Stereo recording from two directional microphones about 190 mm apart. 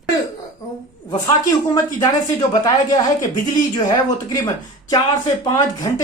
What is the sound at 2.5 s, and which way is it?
Speech, 20° left (ahead or behind).